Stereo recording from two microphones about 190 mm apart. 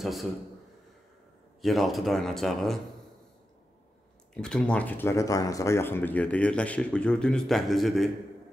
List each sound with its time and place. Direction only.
0.0 s a man's voice: centre (ahead or behind)
1.6 s a man's voice: centre (ahead or behind)
4.3 s speech: 5° left (ahead or behind)